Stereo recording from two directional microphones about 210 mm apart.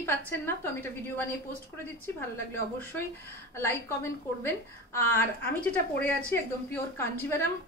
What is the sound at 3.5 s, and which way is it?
A woman's voice, 10° left (ahead or behind).